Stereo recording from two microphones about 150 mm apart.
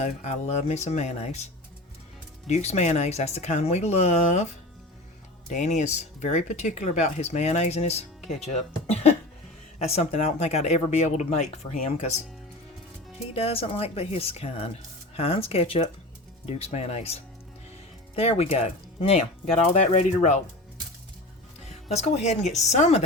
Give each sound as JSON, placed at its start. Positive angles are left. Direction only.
{"t": 0.0, "sound": "speech", "side_deg": 50}
{"t": 2.5, "sound": "speech", "side_deg": 45}
{"t": 5.5, "sound": "speech", "side_deg": 50}
{"t": 13.3, "sound": "speech", "side_deg": 40}
{"t": 21.8, "sound": "speech", "side_deg": 45}